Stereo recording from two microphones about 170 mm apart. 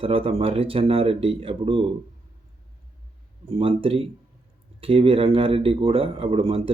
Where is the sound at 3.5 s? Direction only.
35° right (ahead or behind).